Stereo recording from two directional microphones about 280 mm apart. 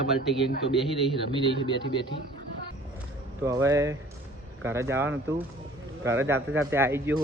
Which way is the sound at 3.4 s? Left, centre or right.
Centre.